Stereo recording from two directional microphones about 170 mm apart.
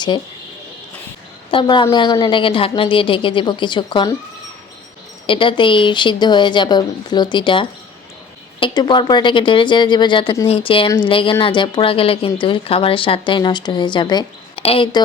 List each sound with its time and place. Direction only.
1.5 s a woman's voice: 30° left (ahead or behind)
5.2 s a woman's voice: 30° left (ahead or behind)